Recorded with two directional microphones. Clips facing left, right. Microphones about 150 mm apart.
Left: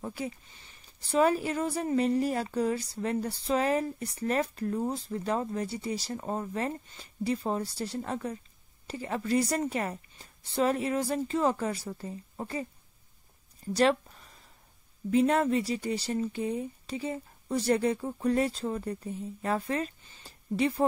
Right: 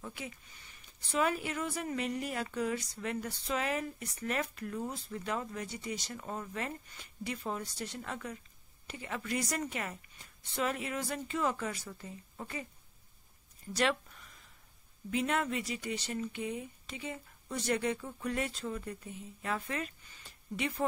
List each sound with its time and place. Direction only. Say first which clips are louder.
0.0 s speech: left 8 dB; 35° left (ahead or behind)
13.7 s a sound: left 7 dB; 35° left (ahead or behind)
15.0 s speech: left 8 dB; 35° left (ahead or behind)